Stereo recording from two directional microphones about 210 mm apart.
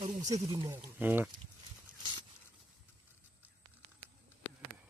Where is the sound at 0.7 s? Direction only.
10° right (ahead or behind).